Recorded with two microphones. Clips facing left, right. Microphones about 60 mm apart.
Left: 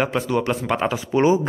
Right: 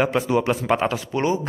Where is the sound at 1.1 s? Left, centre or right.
Centre.